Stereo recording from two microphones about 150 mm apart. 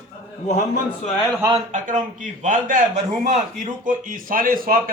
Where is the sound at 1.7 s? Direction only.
60° right (ahead or behind).